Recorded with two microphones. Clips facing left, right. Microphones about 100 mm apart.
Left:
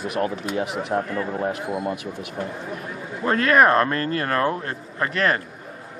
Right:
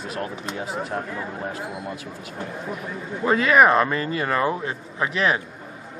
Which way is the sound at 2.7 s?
Centre (ahead or behind).